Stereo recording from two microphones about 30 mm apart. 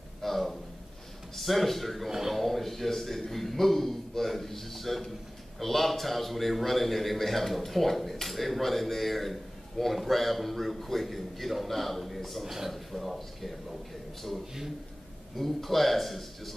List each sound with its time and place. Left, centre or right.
0.2 s a sound: centre
1.3 s speech: centre
2.0 s speech: centre
2.3 s a man's voice: centre
15.3 s a man's voice: centre